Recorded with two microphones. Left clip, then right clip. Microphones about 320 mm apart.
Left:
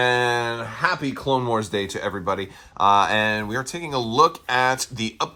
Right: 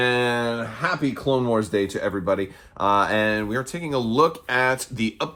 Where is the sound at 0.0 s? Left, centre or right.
Centre.